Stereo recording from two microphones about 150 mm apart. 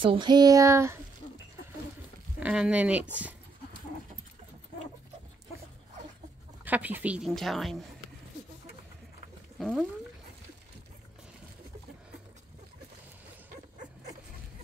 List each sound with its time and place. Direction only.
0.0 s child singing: 30° right (ahead or behind)
2.4 s speech: 5° right (ahead or behind)
6.6 s a woman's voice: 10° right (ahead or behind)
9.6 s speech: centre (ahead or behind)